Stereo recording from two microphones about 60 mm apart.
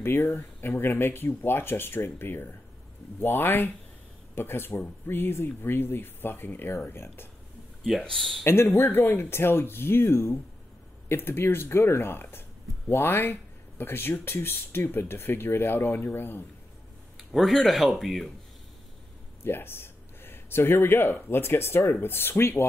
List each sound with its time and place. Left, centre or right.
0.0 s speech: left
8.0 s speech: centre
8.5 s speech: left
17.2 s speech: centre
19.4 s speech: left